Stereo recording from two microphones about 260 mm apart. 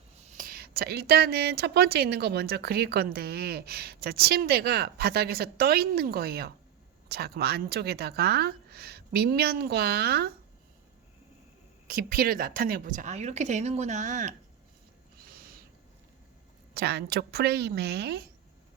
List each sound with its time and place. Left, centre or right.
0.3 s a woman's voice: right
11.9 s speech: right
16.7 s a woman's voice: right